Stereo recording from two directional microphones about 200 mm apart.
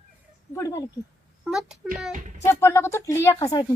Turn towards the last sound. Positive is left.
turn(degrees=15)  # may be behind; listen again after turning